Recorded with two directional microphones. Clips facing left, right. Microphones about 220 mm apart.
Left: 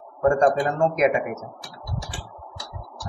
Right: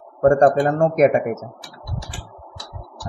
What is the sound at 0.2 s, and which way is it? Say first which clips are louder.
A man's voice: right 5 dB; 45° right (ahead or behind).